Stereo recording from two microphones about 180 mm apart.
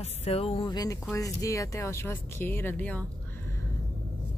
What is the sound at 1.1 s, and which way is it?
Speech, 20° left (ahead or behind).